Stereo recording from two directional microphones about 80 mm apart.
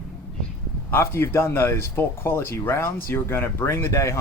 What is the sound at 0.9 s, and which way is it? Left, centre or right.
A man's voice, left.